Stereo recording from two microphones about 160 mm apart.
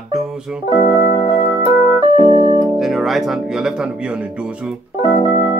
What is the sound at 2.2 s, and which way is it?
Keyboard, 35° right (ahead or behind).